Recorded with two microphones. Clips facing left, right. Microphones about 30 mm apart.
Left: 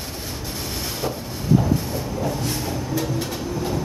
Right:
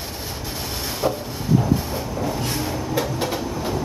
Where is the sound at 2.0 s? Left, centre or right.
Centre.